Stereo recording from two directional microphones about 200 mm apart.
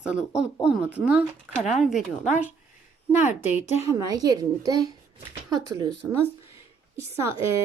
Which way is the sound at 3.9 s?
20° right (ahead or behind).